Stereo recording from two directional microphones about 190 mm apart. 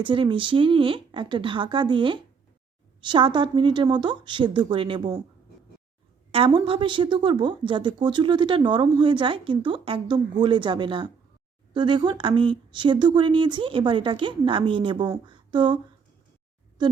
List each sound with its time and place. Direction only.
0.0 s a woman's voice: 25° right (ahead or behind)
6.3 s a woman's voice: 25° right (ahead or behind)
15.3 s a sound: 25° right (ahead or behind)